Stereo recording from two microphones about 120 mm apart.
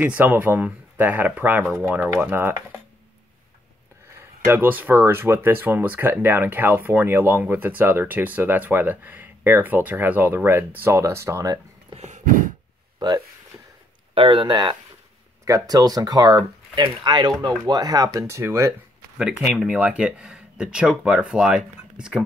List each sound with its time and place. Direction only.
0.0 s speech: 15° right (ahead or behind)
4.5 s speech: 15° right (ahead or behind)
13.0 s speech: 40° right (ahead or behind)
19.1 s speech: 5° right (ahead or behind)